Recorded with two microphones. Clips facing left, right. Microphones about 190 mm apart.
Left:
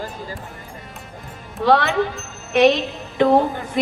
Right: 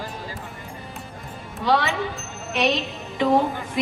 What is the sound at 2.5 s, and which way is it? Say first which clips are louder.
Music: left 8 dB; 60° left (ahead or behind).